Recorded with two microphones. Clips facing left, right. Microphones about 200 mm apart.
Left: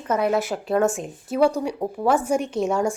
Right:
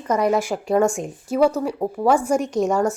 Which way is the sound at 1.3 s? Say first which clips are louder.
Right 2 dB; 5° right (ahead or behind).